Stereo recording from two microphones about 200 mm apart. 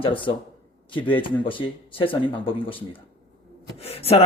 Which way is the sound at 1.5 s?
25° left (ahead or behind).